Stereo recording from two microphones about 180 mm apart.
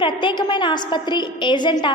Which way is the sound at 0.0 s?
25° left (ahead or behind).